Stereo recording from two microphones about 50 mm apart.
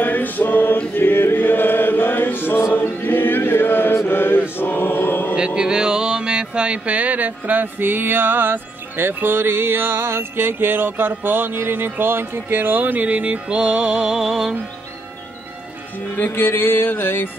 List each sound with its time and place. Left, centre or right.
0.0 s chant: left
3.9 s mantra: left
4.6 s choir: left
5.3 s a sound: centre
16.2 s music: left